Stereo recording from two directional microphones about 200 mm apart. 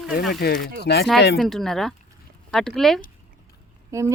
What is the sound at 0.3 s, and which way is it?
Speech, 55° left (ahead or behind).